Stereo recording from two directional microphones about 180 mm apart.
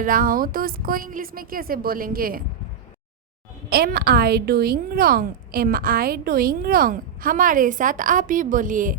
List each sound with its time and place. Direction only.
0.0 s a woman's voice: 50° right (ahead or behind)
3.7 s a woman's voice: 60° right (ahead or behind)